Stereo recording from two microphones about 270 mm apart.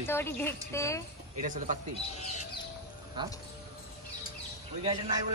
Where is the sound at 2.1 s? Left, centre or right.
Left.